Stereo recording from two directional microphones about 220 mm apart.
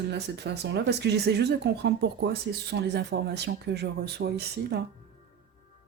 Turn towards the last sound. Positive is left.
turn(degrees=-45)  # may be behind; listen again after turning